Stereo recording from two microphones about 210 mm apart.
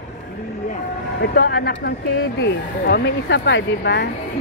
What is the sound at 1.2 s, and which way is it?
Speech, 50° left (ahead or behind).